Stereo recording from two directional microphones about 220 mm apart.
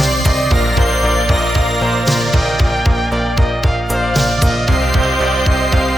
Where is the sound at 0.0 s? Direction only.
Centre (ahead or behind).